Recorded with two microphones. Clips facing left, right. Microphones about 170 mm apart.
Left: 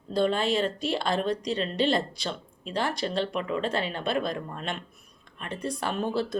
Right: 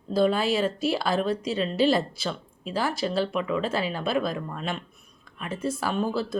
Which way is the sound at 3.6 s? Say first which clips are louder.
Right 1 dB; 5° right (ahead or behind).